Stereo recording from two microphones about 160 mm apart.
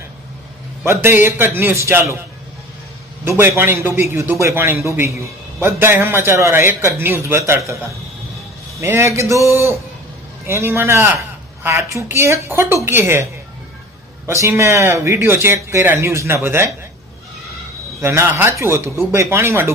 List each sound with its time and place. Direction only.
0.9 s speech: 15° right (ahead or behind)
3.2 s speech: 15° right (ahead or behind)
14.3 s speech: 20° right (ahead or behind)
18.0 s speech: 15° right (ahead or behind)